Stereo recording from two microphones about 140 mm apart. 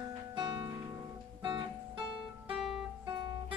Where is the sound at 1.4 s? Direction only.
35° right (ahead or behind).